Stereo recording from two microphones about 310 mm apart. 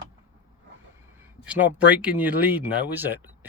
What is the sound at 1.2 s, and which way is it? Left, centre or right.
Speech, centre.